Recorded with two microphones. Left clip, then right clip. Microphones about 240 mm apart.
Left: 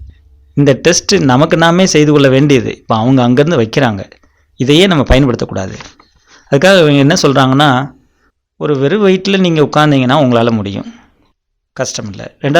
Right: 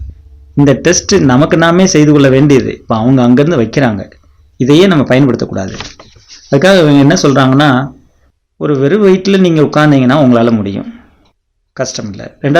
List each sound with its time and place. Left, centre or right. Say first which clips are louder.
0.6 s speech: even; left